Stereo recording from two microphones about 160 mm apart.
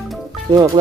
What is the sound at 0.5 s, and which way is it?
Speech, 25° right (ahead or behind).